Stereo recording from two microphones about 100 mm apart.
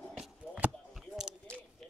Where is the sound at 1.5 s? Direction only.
10° left (ahead or behind).